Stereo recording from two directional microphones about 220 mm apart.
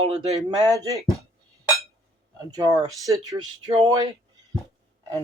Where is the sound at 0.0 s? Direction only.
25° right (ahead or behind).